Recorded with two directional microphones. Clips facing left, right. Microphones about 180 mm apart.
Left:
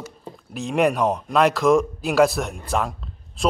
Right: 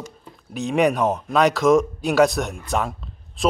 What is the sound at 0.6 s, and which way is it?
A man's voice, centre (ahead or behind).